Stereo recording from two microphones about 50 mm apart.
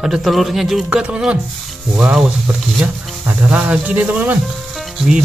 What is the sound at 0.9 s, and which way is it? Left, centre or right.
Speech, centre.